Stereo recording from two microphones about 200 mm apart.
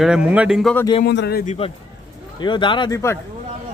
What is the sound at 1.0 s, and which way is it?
Speech, 55° left (ahead or behind).